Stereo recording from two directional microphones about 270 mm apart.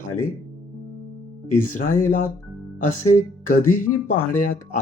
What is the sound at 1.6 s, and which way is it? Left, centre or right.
Speech, left.